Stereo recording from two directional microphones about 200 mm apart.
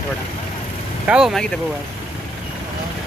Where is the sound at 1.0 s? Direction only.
5° right (ahead or behind).